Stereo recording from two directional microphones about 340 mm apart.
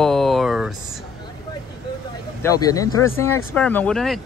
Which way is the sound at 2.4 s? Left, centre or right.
Centre.